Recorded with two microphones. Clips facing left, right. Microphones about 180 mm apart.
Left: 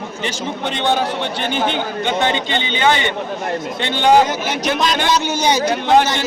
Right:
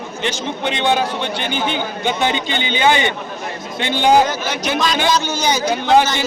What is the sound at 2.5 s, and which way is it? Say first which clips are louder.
Speech: even; 25° left (ahead or behind).